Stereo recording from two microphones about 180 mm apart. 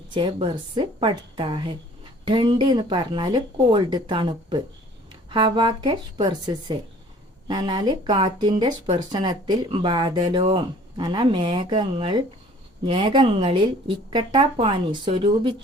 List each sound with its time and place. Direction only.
0.1 s speech: 25° right (ahead or behind)